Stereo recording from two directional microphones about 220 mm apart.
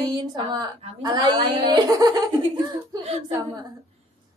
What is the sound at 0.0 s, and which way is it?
A woman's voice, 20° right (ahead or behind).